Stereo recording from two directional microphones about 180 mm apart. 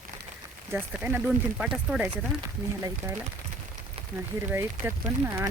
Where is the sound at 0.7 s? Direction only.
10° right (ahead or behind).